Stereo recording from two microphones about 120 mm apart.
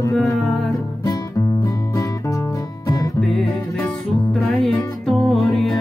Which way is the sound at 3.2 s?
5° left (ahead or behind).